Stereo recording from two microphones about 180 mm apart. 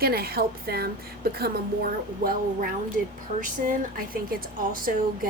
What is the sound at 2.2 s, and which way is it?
Speech, 55° right (ahead or behind).